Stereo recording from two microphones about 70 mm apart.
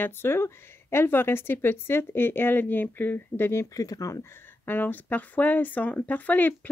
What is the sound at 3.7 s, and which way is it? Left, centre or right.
Speech, left.